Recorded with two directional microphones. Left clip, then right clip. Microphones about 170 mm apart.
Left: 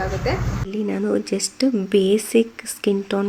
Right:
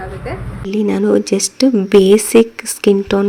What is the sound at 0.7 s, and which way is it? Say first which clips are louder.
Speech: right 9 dB; 30° right (ahead or behind).